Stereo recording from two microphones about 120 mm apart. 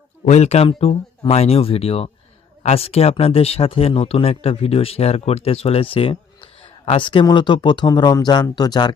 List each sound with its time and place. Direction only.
0.3 s speech: 65° left (ahead or behind); by 9.0 s 35° left (ahead or behind)